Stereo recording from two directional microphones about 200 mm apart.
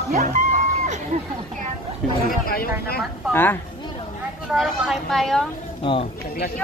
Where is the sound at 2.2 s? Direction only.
50° left (ahead or behind).